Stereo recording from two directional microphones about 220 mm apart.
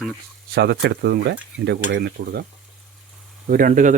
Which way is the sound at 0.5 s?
45° right (ahead or behind).